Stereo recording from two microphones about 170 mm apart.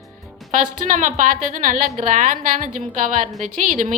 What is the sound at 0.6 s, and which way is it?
A woman's voice, 50° right (ahead or behind).